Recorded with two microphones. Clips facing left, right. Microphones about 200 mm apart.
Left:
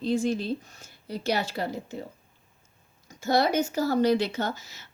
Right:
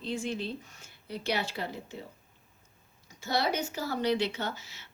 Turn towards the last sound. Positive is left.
turn(degrees=45)  # may be behind; listen again after turning